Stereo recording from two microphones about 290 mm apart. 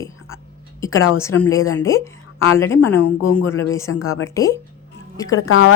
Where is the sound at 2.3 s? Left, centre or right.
Left.